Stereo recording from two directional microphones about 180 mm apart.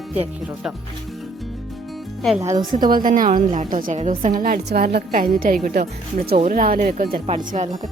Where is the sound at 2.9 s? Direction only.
50° right (ahead or behind).